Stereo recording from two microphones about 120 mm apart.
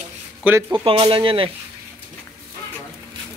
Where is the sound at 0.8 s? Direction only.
45° right (ahead or behind).